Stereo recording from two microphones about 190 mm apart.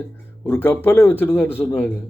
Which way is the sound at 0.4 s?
10° left (ahead or behind).